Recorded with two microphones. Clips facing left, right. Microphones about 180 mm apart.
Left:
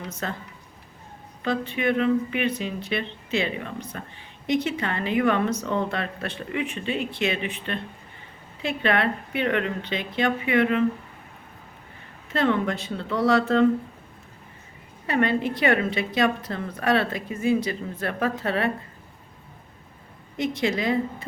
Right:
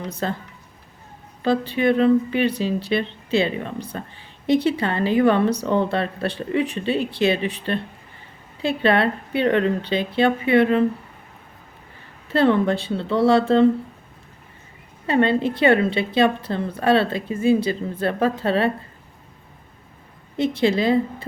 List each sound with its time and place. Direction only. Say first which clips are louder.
0.1 s speech: right 6 dB; 30° right (ahead or behind)
1.4 s speech: right 6 dB; 35° right (ahead or behind)
12.3 s a woman's voice: right 6 dB; 35° right (ahead or behind)
15.0 s a woman's voice: right 4 dB; 30° right (ahead or behind)
20.3 s speech: right 6 dB; 30° right (ahead or behind)